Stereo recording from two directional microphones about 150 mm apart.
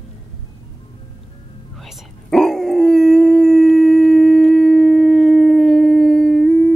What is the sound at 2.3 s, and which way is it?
Howl, 5° left (ahead or behind).